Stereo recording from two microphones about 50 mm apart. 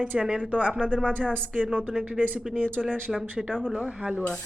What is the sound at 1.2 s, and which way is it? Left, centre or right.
Speech, centre.